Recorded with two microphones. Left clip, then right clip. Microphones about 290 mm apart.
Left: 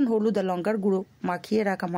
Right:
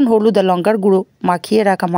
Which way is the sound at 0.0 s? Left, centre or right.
Right.